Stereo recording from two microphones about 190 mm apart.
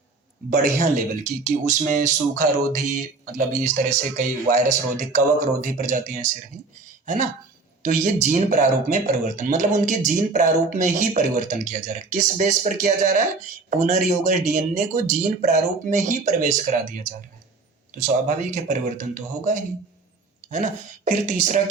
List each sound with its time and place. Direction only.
0.5 s speech: 40° right (ahead or behind)
7.8 s speech: 40° right (ahead or behind)
18.5 s speech: 40° right (ahead or behind)